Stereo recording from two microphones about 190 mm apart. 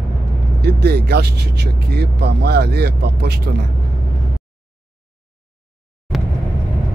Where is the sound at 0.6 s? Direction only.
60° right (ahead or behind).